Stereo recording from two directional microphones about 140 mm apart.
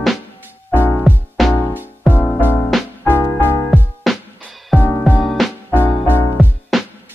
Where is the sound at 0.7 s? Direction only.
15° left (ahead or behind).